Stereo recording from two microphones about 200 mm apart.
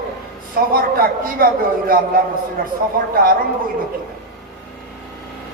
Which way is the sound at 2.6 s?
45° right (ahead or behind).